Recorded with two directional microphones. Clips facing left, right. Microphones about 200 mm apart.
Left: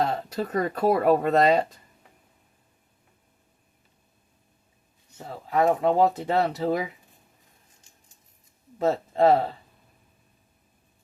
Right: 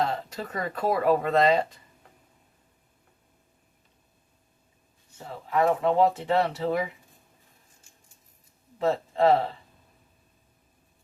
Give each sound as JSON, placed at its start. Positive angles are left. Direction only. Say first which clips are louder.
{"t": 0.0, "sound": "speech", "louder": "left 3 dB", "side_deg": 40}
{"t": 5.1, "sound": "speech", "louder": "left 1 dB", "side_deg": 40}
{"t": 8.8, "sound": "a man's voice", "louder": "left 2 dB", "side_deg": 40}